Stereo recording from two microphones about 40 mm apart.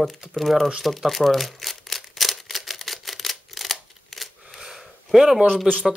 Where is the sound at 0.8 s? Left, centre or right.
Centre.